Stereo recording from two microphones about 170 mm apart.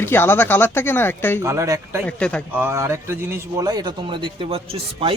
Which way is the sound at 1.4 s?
20° right (ahead or behind).